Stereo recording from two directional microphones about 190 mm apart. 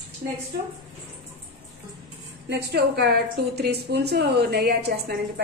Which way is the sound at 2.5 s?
60° right (ahead or behind).